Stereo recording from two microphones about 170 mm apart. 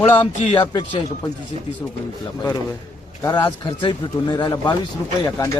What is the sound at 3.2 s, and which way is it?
Speech, 25° left (ahead or behind).